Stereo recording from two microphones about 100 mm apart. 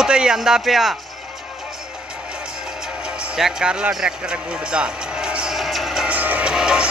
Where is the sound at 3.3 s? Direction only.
5° right (ahead or behind).